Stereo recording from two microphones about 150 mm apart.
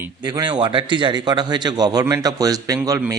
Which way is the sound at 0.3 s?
30° right (ahead or behind).